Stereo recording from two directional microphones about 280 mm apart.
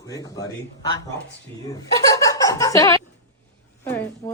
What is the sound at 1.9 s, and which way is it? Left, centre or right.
Snicker, centre.